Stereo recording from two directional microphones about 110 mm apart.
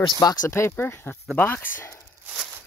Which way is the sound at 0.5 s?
20° left (ahead or behind).